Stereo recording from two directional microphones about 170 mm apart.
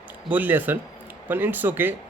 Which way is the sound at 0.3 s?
10° right (ahead or behind).